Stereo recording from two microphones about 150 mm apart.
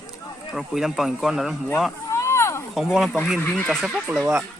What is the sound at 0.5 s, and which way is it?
Speech, centre (ahead or behind).